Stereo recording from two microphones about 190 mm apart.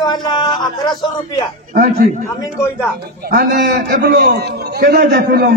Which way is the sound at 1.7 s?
50° right (ahead or behind).